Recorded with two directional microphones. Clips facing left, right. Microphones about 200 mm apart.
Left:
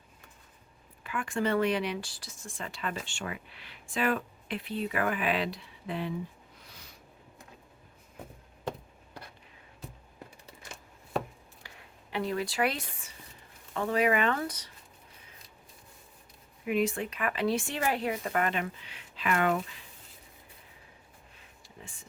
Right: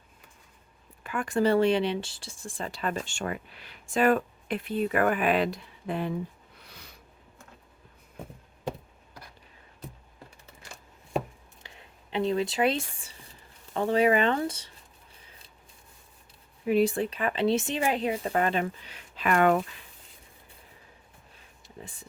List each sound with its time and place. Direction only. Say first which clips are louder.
1.0 s speech: right 5 dB; 40° right (ahead or behind)
11.6 s a sound: right 2 dB; 25° right (ahead or behind)
13.7 s speech: right 4 dB; 30° right (ahead or behind)
16.6 s speech: right 5 dB; 35° right (ahead or behind)